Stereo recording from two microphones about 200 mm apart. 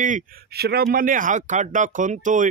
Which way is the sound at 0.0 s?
45° right (ahead or behind).